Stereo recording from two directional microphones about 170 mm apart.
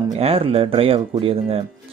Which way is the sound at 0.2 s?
35° right (ahead or behind).